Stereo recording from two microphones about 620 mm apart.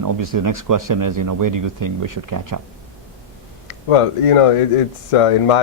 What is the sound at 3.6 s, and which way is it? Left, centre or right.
Speech, left.